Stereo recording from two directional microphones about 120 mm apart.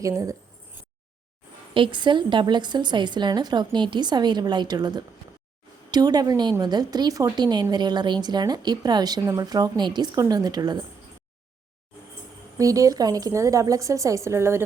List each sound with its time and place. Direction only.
0.0 s speech: 25° right (ahead or behind)
1.7 s a woman's voice: 40° right (ahead or behind)
12.5 s speech: 30° right (ahead or behind)